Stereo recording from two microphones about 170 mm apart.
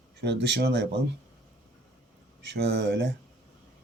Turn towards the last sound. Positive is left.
turn(degrees=-90)